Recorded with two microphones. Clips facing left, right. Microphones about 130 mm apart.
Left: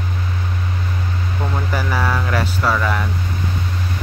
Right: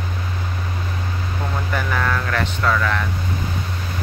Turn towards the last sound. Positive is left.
turn(degrees=15)  # may be behind; listen again after turning